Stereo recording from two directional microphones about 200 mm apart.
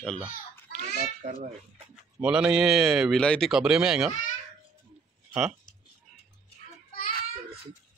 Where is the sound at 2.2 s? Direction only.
5° right (ahead or behind).